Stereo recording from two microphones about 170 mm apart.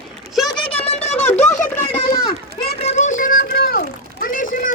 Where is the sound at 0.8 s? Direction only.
40° left (ahead or behind).